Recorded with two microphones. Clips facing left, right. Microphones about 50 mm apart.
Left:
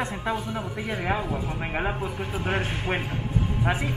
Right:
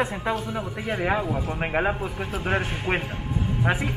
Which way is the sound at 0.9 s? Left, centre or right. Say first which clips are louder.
Right 4 dB; centre.